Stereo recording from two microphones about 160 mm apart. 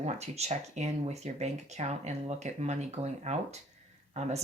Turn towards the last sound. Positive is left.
turn(degrees=-45)  # may be behind; listen again after turning